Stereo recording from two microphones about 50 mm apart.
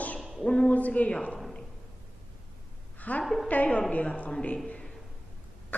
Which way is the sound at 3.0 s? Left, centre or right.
Left.